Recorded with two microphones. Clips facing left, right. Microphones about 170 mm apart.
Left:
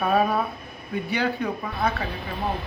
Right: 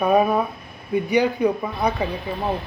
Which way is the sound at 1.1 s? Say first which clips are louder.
Right 7 dB; 15° right (ahead or behind).